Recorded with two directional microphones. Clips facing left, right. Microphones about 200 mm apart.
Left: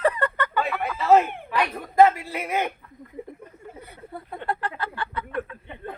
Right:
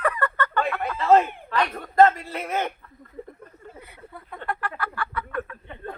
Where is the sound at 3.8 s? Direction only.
40° left (ahead or behind).